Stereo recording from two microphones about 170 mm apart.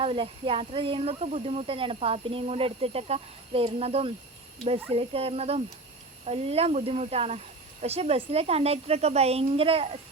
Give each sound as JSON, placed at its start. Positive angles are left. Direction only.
{"t": 0.0, "sound": "speech", "side_deg": -35}